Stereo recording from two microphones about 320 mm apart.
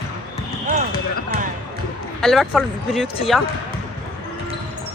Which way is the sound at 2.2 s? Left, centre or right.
Centre.